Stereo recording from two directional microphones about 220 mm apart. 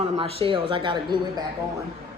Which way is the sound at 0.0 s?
25° right (ahead or behind).